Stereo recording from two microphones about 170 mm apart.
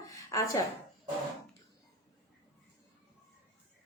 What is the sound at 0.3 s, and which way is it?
Speech, 20° left (ahead or behind).